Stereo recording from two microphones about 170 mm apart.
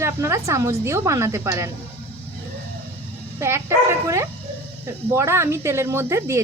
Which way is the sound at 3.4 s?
15° right (ahead or behind).